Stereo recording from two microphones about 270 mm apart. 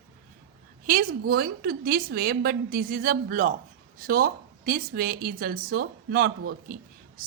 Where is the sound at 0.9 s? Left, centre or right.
Right.